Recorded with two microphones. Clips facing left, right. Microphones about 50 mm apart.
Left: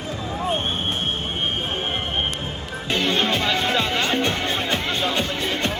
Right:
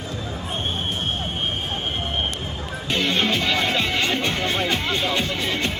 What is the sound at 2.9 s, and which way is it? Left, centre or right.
Speech, left.